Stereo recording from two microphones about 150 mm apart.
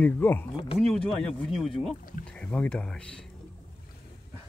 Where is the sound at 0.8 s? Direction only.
Centre (ahead or behind).